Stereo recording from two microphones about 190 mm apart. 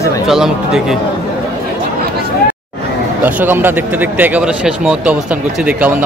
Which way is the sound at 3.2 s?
10° right (ahead or behind).